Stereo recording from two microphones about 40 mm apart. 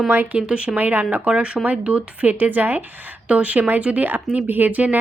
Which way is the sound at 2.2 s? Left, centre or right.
Right.